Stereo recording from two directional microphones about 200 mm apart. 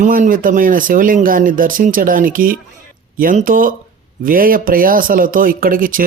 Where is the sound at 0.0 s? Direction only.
40° right (ahead or behind).